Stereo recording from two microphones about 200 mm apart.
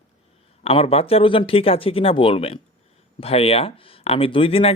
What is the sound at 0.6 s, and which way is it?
Speech, 30° left (ahead or behind).